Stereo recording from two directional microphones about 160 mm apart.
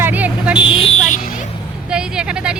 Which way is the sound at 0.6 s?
35° left (ahead or behind).